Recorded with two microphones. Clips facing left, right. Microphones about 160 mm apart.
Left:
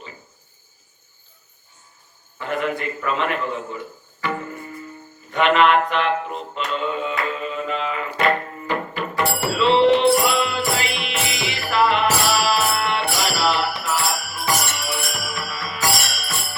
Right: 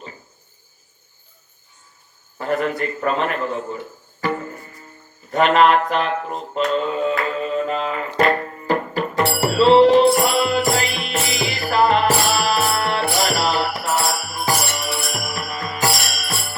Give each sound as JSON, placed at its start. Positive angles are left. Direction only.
{"t": 2.4, "sound": "a man's voice", "side_deg": -40}
{"t": 4.2, "sound": "music", "side_deg": -40}
{"t": 5.3, "sound": "a man's voice", "side_deg": -40}
{"t": 6.7, "sound": "music", "side_deg": -40}